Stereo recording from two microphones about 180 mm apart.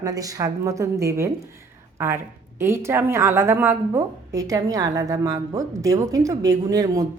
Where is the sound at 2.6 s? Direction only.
15° right (ahead or behind).